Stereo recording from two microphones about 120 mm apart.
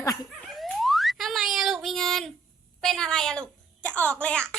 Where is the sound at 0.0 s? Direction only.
30° left (ahead or behind).